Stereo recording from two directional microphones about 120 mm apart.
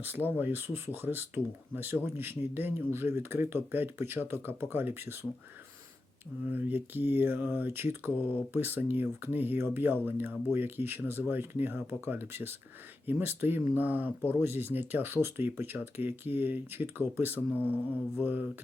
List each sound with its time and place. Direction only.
0.0 s speech: 15° right (ahead or behind)
6.4 s speech: 15° right (ahead or behind)